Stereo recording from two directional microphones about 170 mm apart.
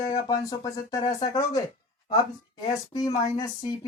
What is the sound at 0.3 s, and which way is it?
Speech, 25° left (ahead or behind).